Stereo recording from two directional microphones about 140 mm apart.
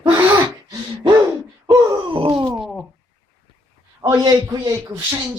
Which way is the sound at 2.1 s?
40° right (ahead or behind).